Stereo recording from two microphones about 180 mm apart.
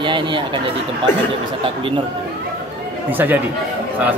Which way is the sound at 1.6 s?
30° right (ahead or behind).